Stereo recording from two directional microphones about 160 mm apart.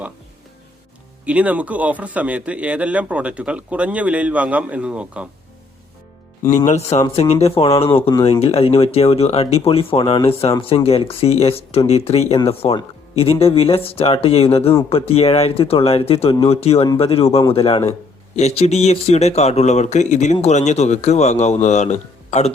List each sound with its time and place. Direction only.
1.2 s a man's voice: 10° right (ahead or behind)
6.7 s speech: 45° left (ahead or behind)